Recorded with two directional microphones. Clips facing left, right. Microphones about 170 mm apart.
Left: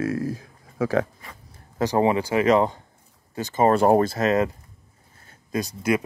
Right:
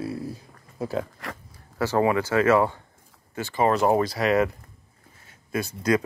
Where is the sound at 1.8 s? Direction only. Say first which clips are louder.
Left 1 dB; 20° left (ahead or behind).